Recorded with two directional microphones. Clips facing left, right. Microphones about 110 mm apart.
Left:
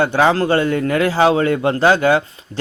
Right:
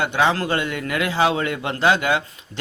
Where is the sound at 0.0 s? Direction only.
35° left (ahead or behind).